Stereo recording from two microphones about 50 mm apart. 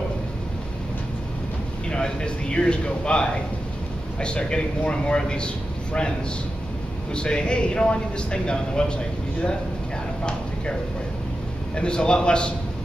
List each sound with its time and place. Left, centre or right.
1.9 s speech: centre
7.2 s speech: centre
11.7 s speech: centre